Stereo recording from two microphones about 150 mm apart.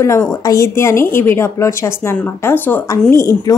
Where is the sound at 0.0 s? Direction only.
20° left (ahead or behind).